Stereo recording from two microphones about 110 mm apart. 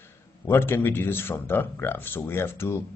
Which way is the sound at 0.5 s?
20° left (ahead or behind).